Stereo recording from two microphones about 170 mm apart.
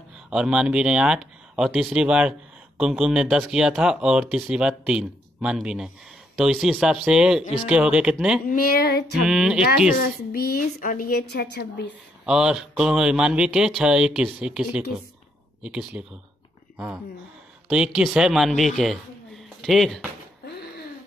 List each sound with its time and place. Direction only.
0.3 s speech: 5° right (ahead or behind)
8.5 s a woman's voice: 60° left (ahead or behind)
9.2 s speech: 5° right (ahead or behind)
9.9 s a woman's voice: 60° left (ahead or behind); by 11.9 s 90° left
12.3 s a man's voice: 5° right (ahead or behind)